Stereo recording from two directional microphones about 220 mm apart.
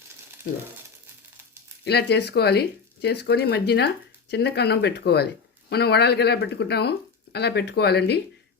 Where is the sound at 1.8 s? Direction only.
50° left (ahead or behind).